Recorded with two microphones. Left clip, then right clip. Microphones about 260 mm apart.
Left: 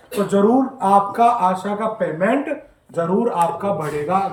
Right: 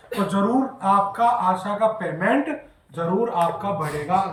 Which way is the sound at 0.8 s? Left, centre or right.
Centre.